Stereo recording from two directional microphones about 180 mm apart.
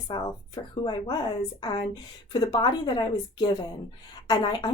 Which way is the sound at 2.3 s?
25° left (ahead or behind).